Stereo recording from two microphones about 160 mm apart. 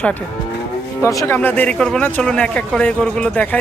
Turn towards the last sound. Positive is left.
turn(degrees=10)  # may be behind; listen again after turning